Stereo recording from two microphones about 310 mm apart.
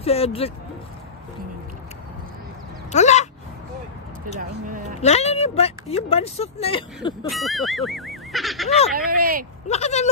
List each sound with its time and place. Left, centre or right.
0.0 s speech: centre
2.9 s a sound: left
4.4 s speech: right
5.0 s speech: left
7.2 s speech: centre
8.9 s speech: right
9.7 s speech: left